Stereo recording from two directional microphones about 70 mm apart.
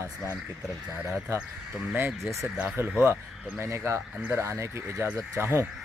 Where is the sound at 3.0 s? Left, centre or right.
Right.